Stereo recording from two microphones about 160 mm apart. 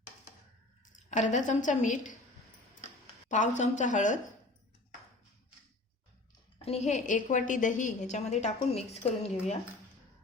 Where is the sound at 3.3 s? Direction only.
50° left (ahead or behind).